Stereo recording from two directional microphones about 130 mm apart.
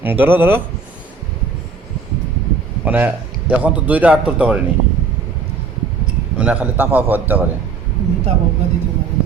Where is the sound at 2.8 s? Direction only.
15° right (ahead or behind).